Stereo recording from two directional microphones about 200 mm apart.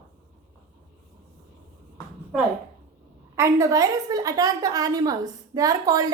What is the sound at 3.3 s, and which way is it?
A woman's voice, 15° right (ahead or behind).